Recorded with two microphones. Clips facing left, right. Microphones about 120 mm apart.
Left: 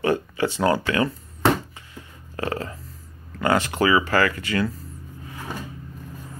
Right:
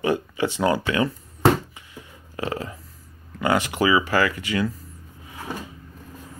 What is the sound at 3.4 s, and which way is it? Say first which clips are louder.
Speech: left 1 dB; 15° right (ahead or behind).